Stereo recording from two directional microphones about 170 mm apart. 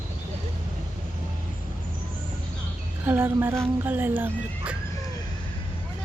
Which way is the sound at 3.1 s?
10° right (ahead or behind).